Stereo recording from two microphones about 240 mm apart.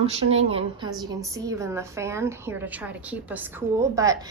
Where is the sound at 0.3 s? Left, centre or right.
Right.